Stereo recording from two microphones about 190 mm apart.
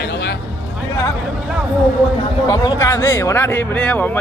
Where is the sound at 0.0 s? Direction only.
60° left (ahead or behind).